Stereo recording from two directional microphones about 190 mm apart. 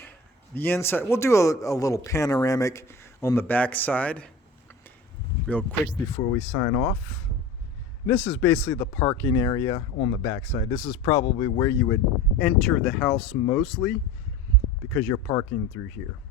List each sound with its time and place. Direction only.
0.5 s speech: 10° left (ahead or behind)
5.5 s speech: 10° left (ahead or behind)
8.0 s speech: 10° left (ahead or behind)
14.9 s speech: 10° left (ahead or behind)